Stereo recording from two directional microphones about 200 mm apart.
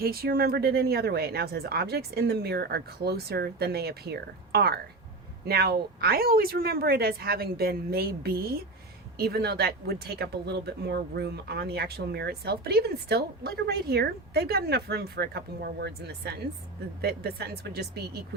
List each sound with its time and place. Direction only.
0.0 s speech: 50° right (ahead or behind)